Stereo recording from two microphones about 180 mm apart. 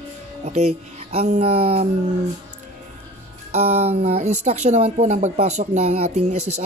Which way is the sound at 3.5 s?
35° right (ahead or behind).